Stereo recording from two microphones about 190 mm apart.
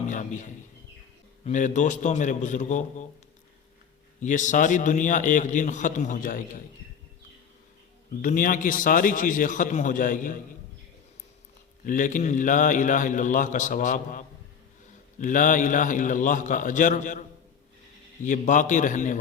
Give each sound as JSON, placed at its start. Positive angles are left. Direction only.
{"t": 0.1, "sound": "a man's voice", "side_deg": 40}
{"t": 4.2, "sound": "a man's voice", "side_deg": 40}
{"t": 8.2, "sound": "a man's voice", "side_deg": 45}
{"t": 11.9, "sound": "a man's voice", "side_deg": 45}
{"t": 18.3, "sound": "a man's voice", "side_deg": 40}